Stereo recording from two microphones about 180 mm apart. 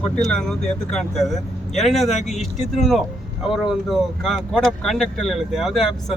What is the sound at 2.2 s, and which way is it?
Speech, 40° left (ahead or behind).